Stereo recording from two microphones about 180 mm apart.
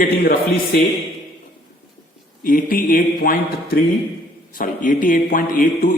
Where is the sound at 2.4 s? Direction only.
50° left (ahead or behind).